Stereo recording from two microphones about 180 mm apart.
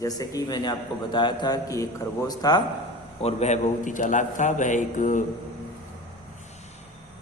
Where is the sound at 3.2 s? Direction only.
40° left (ahead or behind).